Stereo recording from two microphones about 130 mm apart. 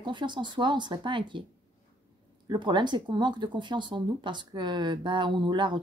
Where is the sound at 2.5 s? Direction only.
35° right (ahead or behind).